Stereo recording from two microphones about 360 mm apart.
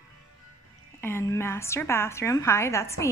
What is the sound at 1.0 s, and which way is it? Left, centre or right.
A woman's voice, centre.